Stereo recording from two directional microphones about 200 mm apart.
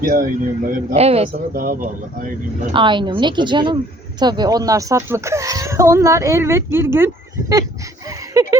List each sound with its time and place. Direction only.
0.0 s speech: 45° right (ahead or behind)
0.9 s speech: 30° right (ahead or behind)
1.5 s speech: 45° right (ahead or behind)
2.7 s a woman's voice: 25° right (ahead or behind)
8.3 s a sound: 15° right (ahead or behind)